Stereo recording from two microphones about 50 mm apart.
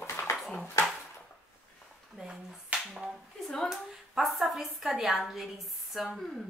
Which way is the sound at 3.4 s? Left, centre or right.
Centre.